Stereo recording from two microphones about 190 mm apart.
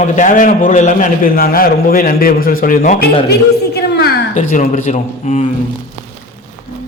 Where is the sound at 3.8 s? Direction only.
55° left (ahead or behind).